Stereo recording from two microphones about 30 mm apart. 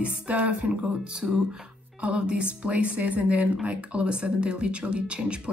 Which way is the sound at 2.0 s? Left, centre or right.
Right.